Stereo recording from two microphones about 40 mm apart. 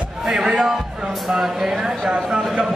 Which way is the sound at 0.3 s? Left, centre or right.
Centre.